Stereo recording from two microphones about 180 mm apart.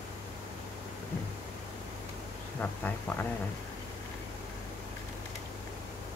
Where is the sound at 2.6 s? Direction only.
10° left (ahead or behind).